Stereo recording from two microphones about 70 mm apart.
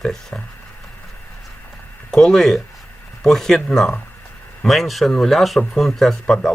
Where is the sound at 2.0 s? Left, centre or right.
Centre.